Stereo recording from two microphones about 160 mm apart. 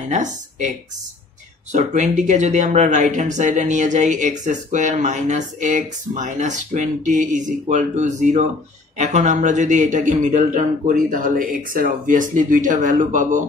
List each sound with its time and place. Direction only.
0.1 s speech: 50° right (ahead or behind)
1.7 s speech: 50° right (ahead or behind)